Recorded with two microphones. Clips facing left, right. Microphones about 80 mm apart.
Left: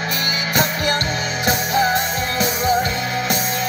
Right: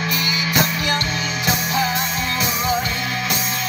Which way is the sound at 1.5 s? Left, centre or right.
Left.